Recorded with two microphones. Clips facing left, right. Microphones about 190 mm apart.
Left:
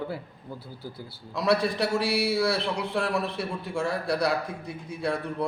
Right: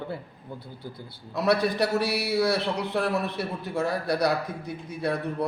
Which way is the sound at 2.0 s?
30° left (ahead or behind).